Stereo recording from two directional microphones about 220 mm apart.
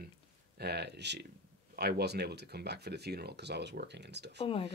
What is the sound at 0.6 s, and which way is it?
Speech, 50° right (ahead or behind).